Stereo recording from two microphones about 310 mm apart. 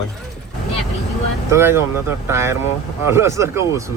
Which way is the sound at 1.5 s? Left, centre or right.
Centre.